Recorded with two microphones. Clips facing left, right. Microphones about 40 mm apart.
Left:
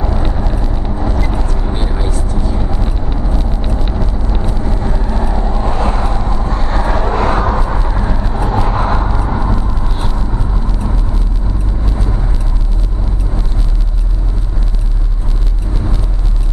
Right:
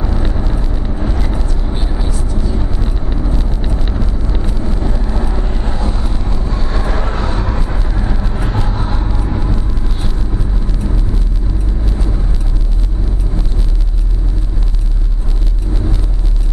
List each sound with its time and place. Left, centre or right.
0.0 s vehicle: centre
1.7 s vehicle: centre
2.0 s vehicle: left
2.7 s vehicle: centre
5.6 s vehicle: left
6.5 s vehicle: left
7.1 s vehicle: left
7.8 s vehicle: centre
8.6 s vehicle: left
9.0 s vehicle: left